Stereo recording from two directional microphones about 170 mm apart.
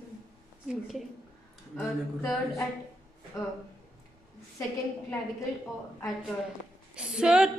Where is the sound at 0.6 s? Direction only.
Centre (ahead or behind).